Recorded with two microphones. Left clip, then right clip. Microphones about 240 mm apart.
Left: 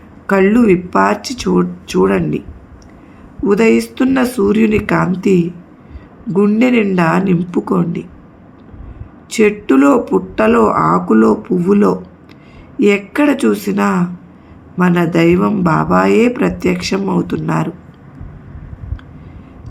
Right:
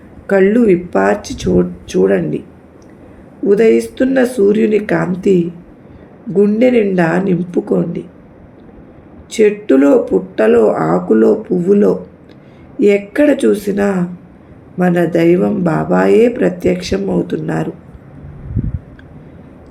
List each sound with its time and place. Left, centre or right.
0.3 s speech: left
3.4 s speech: left
9.3 s speech: left